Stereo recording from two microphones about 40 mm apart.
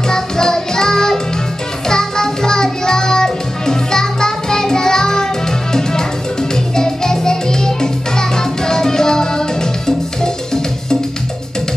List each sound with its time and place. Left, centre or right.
0.1 s music: centre